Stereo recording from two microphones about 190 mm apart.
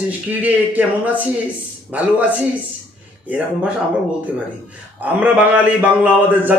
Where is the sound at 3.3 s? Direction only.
5° right (ahead or behind).